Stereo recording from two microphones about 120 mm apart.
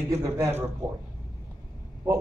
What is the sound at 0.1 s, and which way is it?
Speech, 25° right (ahead or behind).